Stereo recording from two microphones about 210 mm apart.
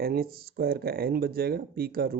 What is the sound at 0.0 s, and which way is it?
Speech, 45° right (ahead or behind).